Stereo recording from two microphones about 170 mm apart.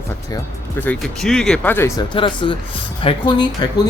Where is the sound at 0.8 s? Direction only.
5° left (ahead or behind).